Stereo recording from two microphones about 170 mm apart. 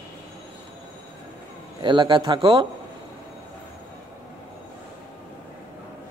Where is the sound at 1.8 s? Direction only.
30° right (ahead or behind).